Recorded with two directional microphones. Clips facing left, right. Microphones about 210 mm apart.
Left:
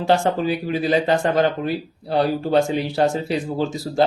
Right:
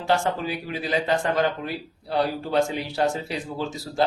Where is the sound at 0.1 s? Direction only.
25° left (ahead or behind).